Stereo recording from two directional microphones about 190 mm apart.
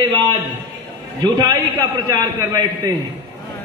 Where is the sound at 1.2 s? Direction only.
20° right (ahead or behind).